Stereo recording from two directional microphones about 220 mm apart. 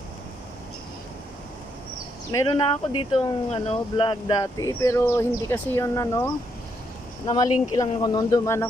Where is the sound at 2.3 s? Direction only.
20° left (ahead or behind).